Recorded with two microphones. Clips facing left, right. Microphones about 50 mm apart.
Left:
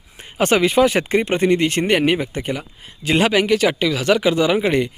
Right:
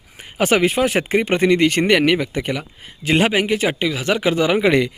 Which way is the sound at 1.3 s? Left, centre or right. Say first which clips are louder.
Right 2 dB; right.